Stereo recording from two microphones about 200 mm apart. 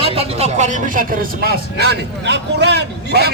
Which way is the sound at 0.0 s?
25° right (ahead or behind).